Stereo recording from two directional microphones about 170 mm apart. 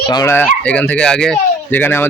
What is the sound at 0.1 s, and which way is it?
Speech, 20° left (ahead or behind).